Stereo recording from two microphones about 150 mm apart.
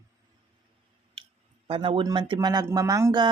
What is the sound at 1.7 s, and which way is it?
Speech, 35° right (ahead or behind).